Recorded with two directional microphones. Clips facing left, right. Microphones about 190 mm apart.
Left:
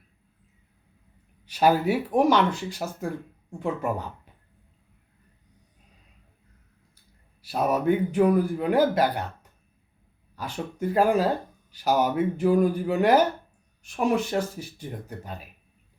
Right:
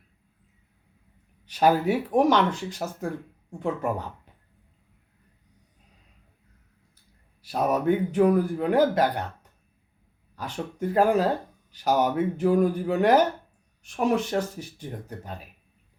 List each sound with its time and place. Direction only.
1.5 s speech: 10° left (ahead or behind)
7.4 s speech: 10° left (ahead or behind)
10.3 s speech: 10° left (ahead or behind)